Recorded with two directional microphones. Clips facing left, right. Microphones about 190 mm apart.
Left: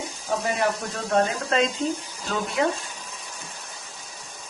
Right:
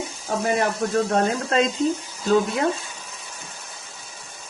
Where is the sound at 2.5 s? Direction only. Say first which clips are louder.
Right 1 dB; 10° right (ahead or behind).